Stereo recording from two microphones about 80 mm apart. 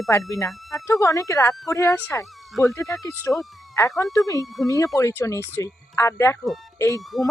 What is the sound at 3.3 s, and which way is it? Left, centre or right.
Speech, left.